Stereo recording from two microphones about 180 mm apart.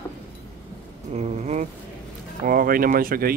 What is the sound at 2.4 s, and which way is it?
Speech, 50° right (ahead or behind).